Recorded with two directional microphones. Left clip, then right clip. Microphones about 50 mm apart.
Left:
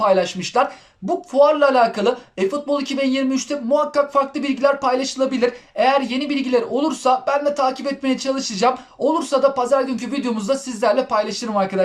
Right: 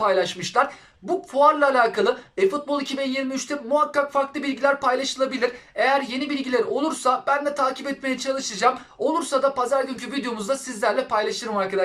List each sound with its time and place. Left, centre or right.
0.0 s speech: left